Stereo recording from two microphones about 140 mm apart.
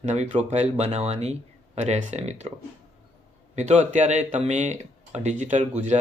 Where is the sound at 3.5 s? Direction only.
55° right (ahead or behind).